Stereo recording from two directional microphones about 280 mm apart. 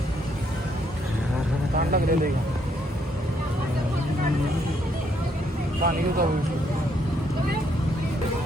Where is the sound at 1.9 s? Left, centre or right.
Right.